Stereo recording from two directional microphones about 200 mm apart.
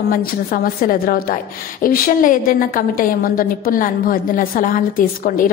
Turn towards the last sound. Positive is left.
turn(degrees=45)  # may be behind; listen again after turning